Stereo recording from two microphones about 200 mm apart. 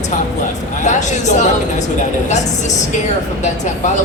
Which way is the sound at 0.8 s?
35° left (ahead or behind).